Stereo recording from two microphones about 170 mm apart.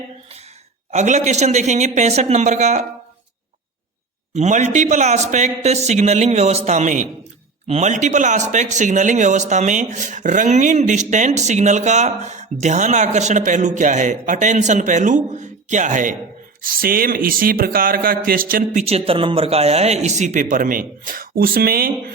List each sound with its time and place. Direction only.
0.9 s a man's voice: 45° right (ahead or behind)
4.4 s a man's voice: 45° right (ahead or behind); by 22.1 s 60° right (ahead or behind)